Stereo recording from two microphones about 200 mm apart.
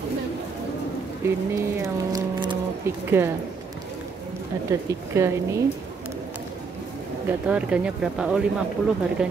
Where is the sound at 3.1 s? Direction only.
10° right (ahead or behind).